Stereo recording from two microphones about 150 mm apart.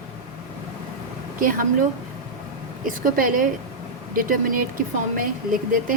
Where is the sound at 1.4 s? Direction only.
65° right (ahead or behind).